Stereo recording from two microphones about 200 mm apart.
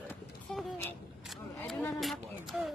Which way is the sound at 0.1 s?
5° left (ahead or behind).